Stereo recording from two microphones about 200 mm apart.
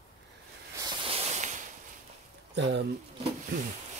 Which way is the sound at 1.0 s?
30° right (ahead or behind).